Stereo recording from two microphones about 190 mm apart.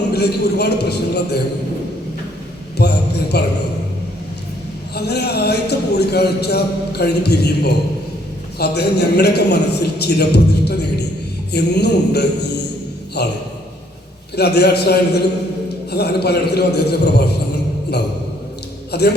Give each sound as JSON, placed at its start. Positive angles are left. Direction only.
{"t": 0.1, "sound": "a man's voice", "side_deg": 60}
{"t": 2.8, "sound": "mantra", "side_deg": 60}
{"t": 3.3, "sound": "a man's voice", "side_deg": 60}
{"t": 4.9, "sound": "a man's voice", "side_deg": 60}
{"t": 14.3, "sound": "a man's voice", "side_deg": 60}
{"t": 18.9, "sound": "speech", "side_deg": 60}